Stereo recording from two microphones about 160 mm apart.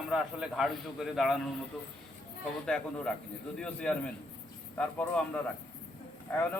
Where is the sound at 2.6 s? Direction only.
5° left (ahead or behind).